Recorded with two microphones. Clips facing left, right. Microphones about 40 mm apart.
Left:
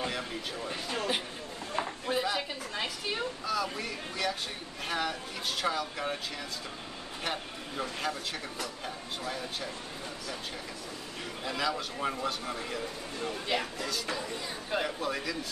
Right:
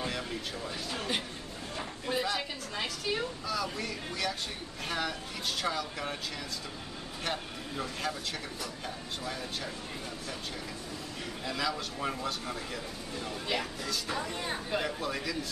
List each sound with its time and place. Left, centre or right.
0.8 s speech: left
2.0 s a woman's voice: centre
7.2 s a woman's voice: centre
11.4 s a woman's voice: centre